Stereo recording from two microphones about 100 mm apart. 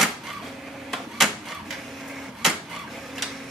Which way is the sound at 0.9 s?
Centre (ahead or behind).